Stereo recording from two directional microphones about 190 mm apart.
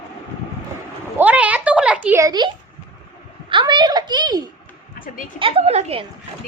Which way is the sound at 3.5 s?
25° right (ahead or behind).